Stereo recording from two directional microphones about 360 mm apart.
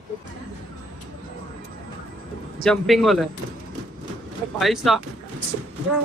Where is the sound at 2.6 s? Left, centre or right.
Centre.